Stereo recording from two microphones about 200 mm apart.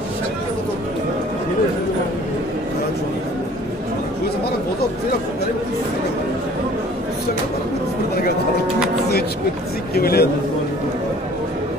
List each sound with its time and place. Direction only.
9.9 s a man's voice: 50° left (ahead or behind)